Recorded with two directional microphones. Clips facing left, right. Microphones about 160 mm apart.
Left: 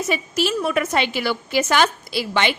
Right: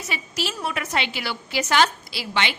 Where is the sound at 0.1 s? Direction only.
50° left (ahead or behind).